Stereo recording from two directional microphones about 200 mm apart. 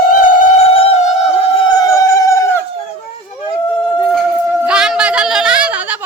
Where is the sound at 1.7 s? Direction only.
20° left (ahead or behind).